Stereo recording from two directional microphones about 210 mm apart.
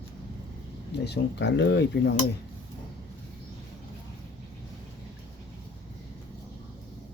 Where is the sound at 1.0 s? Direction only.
55° left (ahead or behind).